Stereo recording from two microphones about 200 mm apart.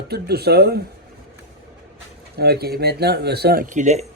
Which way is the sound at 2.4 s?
50° right (ahead or behind).